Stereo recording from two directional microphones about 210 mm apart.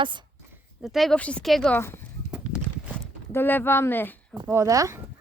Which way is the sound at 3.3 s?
10° left (ahead or behind).